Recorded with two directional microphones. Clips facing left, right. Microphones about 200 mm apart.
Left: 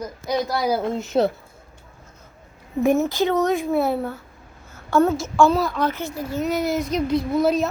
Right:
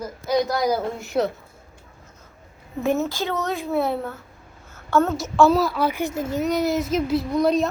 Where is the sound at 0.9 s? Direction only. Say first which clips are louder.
Left 3 dB; 20° left (ahead or behind).